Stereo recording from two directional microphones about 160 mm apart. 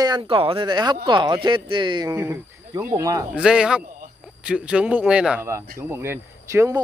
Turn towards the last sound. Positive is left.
turn(degrees=-20)  # may be behind; listen again after turning